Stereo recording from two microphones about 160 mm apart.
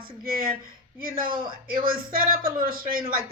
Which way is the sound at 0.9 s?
65° right (ahead or behind).